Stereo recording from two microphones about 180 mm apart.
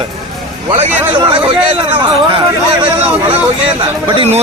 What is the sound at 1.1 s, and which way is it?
Speech, 25° right (ahead or behind).